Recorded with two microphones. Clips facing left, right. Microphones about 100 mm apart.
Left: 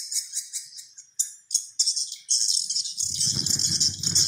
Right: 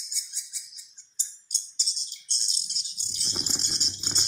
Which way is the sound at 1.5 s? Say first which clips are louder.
Left 1 dB; 45° right (ahead or behind).